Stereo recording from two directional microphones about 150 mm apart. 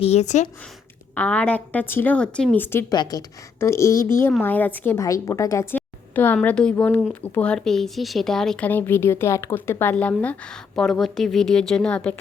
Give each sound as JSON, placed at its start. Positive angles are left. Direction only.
{"t": 0.0, "sound": "a woman's voice", "side_deg": 45}
{"t": 1.1, "sound": "speech", "side_deg": 10}
{"t": 2.9, "sound": "a woman's voice", "side_deg": 25}